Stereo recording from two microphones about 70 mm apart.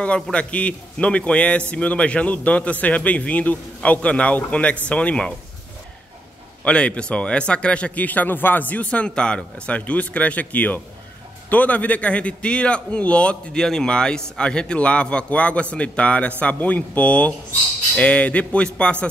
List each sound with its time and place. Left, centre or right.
0.0 s a man's voice: centre
6.6 s a man's voice: centre